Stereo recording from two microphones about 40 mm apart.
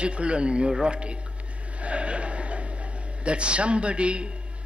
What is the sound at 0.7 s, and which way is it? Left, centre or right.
Speech, right.